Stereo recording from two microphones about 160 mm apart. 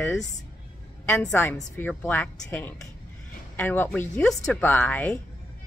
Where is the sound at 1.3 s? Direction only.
10° left (ahead or behind).